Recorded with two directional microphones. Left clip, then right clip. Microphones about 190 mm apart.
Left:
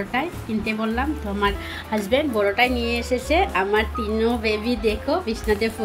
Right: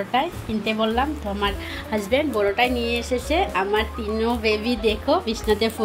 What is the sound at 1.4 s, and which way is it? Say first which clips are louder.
A woman's voice: left 3 dB; centre (ahead or behind).